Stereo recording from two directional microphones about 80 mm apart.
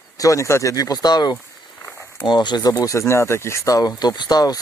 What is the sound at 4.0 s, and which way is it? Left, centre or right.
Speech, left.